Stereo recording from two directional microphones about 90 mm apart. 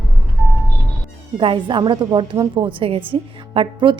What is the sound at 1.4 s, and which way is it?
A woman's voice, 65° right (ahead or behind).